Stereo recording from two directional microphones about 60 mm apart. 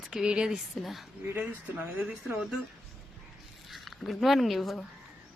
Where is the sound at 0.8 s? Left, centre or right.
Centre.